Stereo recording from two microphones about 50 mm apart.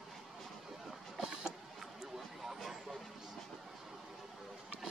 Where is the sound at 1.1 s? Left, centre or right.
Centre.